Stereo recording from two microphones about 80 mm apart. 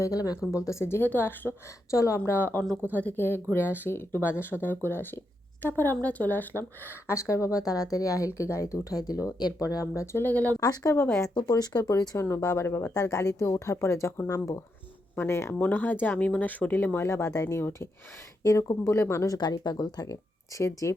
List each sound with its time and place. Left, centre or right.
0.5 s speech: left
1.9 s speech: left
2.3 s speech: left
10.6 s speech: left
15.5 s speech: left
17.1 s speech: left
18.4 s speech: left
18.9 s speech: left
19.3 s speech: left